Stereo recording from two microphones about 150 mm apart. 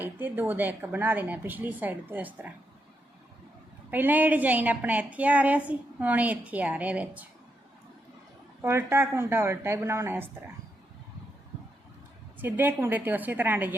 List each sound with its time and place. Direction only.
0.0 s a woman's voice: 15° right (ahead or behind)
3.9 s a woman's voice: 10° right (ahead or behind)
8.6 s a woman's voice: 15° right (ahead or behind)
12.4 s a woman's voice: 10° right (ahead or behind)